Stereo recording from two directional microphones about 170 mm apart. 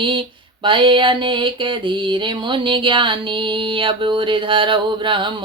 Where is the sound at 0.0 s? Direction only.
30° right (ahead or behind).